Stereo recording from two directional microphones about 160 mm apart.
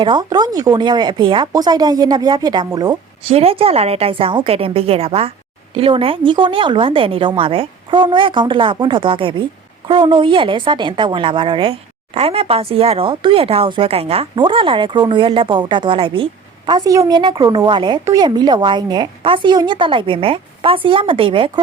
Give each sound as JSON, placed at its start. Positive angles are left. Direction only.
{"t": 0.0, "sound": "speech", "side_deg": -30}
{"t": 3.2, "sound": "speech", "side_deg": -40}